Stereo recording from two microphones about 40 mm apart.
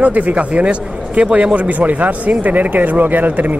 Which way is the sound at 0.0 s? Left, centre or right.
Right.